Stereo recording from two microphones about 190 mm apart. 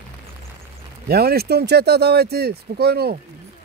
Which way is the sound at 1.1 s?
55° right (ahead or behind).